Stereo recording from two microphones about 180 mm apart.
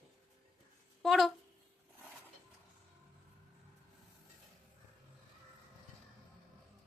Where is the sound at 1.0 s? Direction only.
Centre (ahead or behind).